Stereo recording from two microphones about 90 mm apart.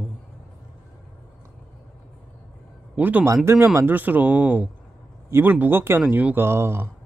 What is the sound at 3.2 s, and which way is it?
Speech, 35° right (ahead or behind).